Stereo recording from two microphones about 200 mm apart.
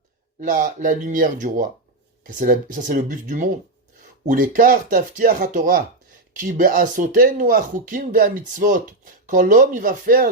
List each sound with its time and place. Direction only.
0.3 s speech: 40° right (ahead or behind)